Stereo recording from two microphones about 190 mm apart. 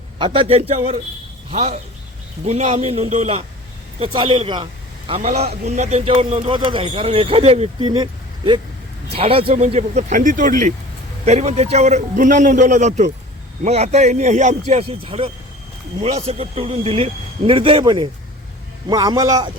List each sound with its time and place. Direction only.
0.2 s a man's voice: 30° right (ahead or behind)